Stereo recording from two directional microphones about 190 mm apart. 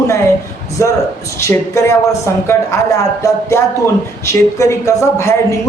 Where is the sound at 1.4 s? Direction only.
15° left (ahead or behind).